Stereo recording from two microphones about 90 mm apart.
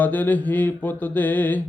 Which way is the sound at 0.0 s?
20° left (ahead or behind).